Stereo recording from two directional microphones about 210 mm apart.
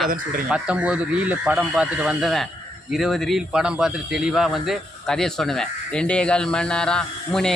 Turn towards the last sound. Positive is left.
turn(degrees=5)  # may be behind; listen again after turning